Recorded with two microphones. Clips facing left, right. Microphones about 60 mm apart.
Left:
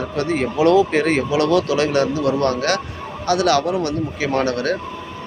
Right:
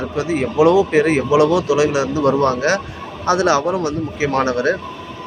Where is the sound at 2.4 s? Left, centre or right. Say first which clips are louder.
Right 3 dB; centre.